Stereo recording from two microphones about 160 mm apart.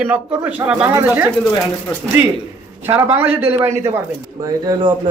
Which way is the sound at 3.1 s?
15° right (ahead or behind).